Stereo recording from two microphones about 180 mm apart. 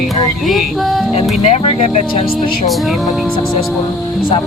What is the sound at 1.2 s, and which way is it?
Speech, 35° left (ahead or behind).